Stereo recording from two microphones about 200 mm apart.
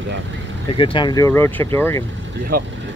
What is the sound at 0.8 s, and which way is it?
Speech, 25° left (ahead or behind).